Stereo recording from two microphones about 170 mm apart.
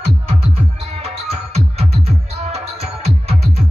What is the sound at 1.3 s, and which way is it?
Music, 40° right (ahead or behind).